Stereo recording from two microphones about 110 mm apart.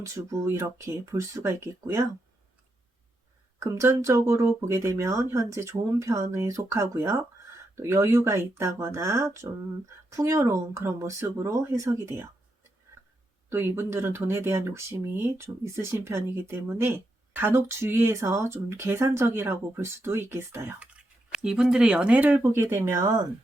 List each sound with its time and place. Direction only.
0.0 s speech: 30° right (ahead or behind)
3.6 s speech: 25° right (ahead or behind)
13.5 s speech: 25° right (ahead or behind)
21.3 s speech: 5° right (ahead or behind); by 23.1 s 25° right (ahead or behind)